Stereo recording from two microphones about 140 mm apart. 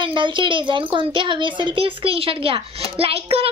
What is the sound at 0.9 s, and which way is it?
A child's voice, 35° right (ahead or behind).